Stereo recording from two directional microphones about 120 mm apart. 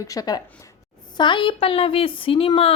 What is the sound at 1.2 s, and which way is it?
A woman's voice, 45° left (ahead or behind).